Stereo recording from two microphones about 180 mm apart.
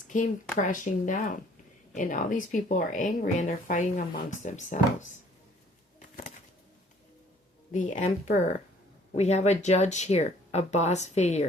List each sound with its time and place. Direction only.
0.1 s speech: 45° left (ahead or behind)
7.7 s speech: 40° left (ahead or behind)